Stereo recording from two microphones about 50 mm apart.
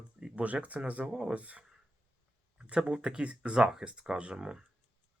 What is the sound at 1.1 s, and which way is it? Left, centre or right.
Speech, centre.